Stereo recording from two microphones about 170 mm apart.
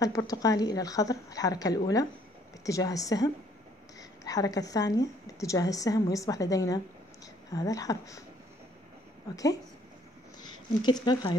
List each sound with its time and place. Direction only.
0.0 s a woman's voice: 20° left (ahead or behind)
9.3 s a woman's voice: 20° left (ahead or behind)
10.8 s a woman's voice: 25° left (ahead or behind)